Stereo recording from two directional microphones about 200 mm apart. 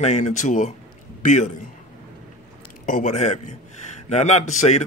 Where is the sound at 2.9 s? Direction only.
40° left (ahead or behind).